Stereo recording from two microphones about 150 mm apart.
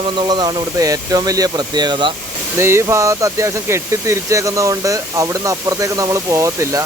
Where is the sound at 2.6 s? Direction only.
15° right (ahead or behind).